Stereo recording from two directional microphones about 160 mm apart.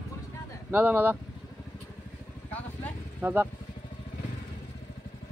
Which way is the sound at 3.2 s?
10° right (ahead or behind).